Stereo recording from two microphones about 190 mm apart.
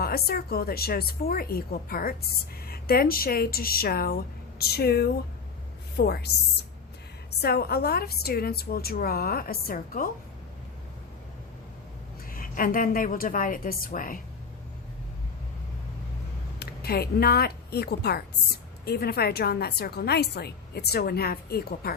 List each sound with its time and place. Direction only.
0.0 s a woman's voice: 55° left (ahead or behind)
12.3 s a woman's voice: 50° left (ahead or behind)
16.6 s a woman's voice: 55° left (ahead or behind)